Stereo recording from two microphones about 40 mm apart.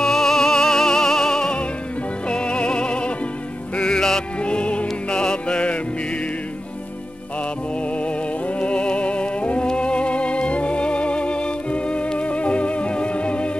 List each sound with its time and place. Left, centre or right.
0.0 s music: centre
8.5 s music: left